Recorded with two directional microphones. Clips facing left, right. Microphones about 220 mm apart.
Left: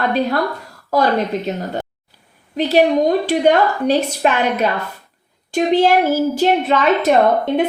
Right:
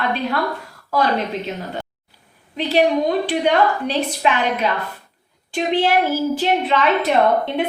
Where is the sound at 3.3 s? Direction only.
45° left (ahead or behind).